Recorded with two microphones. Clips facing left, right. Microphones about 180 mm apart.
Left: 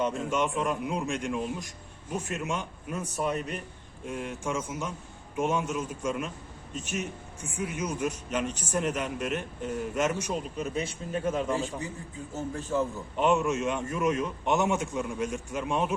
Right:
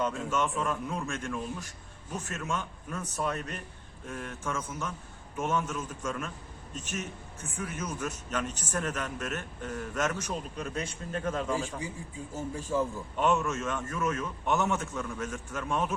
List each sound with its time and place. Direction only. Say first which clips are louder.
0.0 s a man's voice: left 2 dB; 15° left (ahead or behind)
12.3 s a man's voice: left 2 dB; 10° right (ahead or behind)
13.1 s a man's voice: left 3 dB; 10° left (ahead or behind)